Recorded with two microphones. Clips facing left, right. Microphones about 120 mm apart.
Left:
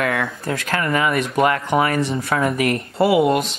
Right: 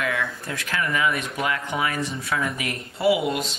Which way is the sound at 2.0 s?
65° left (ahead or behind).